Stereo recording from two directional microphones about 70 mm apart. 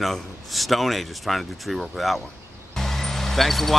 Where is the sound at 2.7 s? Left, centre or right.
Centre.